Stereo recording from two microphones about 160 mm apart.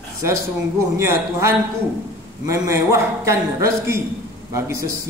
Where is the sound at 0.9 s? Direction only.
15° right (ahead or behind).